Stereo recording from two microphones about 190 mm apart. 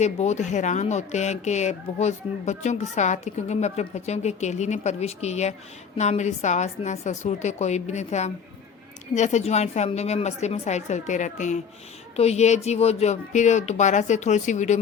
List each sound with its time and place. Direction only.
0.0 s speech: 35° left (ahead or behind)